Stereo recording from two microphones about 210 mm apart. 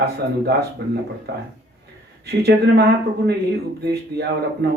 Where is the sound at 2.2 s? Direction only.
50° right (ahead or behind).